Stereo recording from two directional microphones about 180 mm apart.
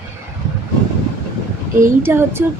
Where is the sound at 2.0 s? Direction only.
15° right (ahead or behind).